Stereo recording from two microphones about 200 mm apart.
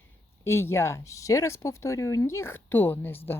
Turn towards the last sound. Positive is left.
turn(degrees=10)  # may be behind; listen again after turning